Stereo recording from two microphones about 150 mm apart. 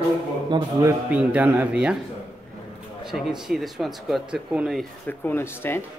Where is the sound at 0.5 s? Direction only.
30° right (ahead or behind).